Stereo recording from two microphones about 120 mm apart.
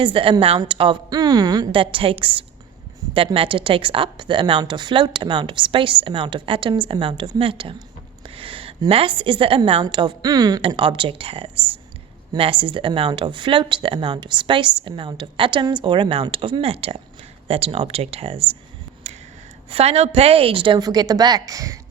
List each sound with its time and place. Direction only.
0.0 s a woman's voice: 45° right (ahead or behind)
1.1 s a woman's voice: 35° right (ahead or behind)
1.7 s a woman's voice: 45° right (ahead or behind)
8.2 s a sound: 50° right (ahead or behind)
8.9 s a woman's voice: 50° right (ahead or behind); by 10.6 s 30° right (ahead or behind)
10.7 s a woman's voice: 45° right (ahead or behind)
19.1 s finger snapping: 65° right (ahead or behind)
19.7 s a woman's voice: 60° right (ahead or behind); by 21.8 s 30° right (ahead or behind)